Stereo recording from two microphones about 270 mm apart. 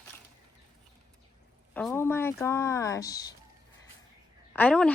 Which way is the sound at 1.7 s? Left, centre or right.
Centre.